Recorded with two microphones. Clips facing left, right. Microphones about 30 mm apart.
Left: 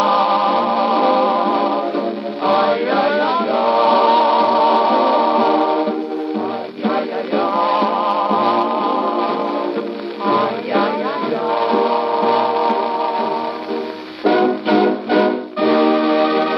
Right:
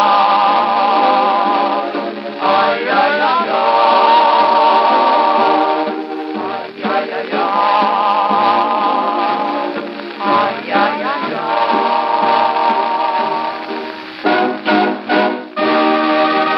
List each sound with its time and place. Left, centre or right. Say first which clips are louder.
0.0 s music: right 4 dB; right
2.6 s chant: right 2 dB; centre
3.5 s music: right 2 dB; right
7.3 s music: right 2 dB; centre
8.4 s music: right 3 dB; right
8.7 s music: right 3 dB; centre
9.2 s music: right 3 dB; centre
11.4 s music: right 3 dB; centre
11.9 s a sound: right 3 dB; centre
13.0 s music: right 3 dB; right
14.4 s music: right 1 dB; centre; by 16.4 s right